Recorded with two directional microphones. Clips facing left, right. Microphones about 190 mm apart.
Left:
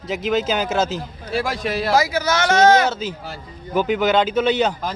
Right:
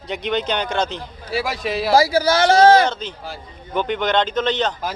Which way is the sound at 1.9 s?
30° right (ahead or behind).